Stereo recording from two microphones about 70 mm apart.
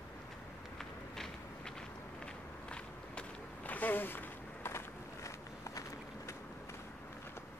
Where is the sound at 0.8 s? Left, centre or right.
Centre.